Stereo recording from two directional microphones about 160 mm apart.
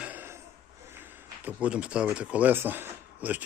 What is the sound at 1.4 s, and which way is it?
Speech, 10° right (ahead or behind).